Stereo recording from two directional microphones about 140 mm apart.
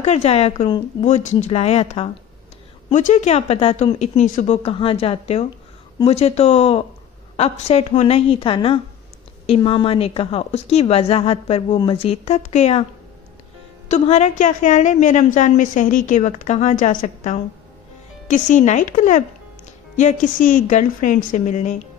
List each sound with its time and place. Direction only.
0.0 s a woman's voice: 50° left (ahead or behind)
2.9 s a woman's voice: 60° left (ahead or behind)
13.8 s a woman's voice: 55° left (ahead or behind)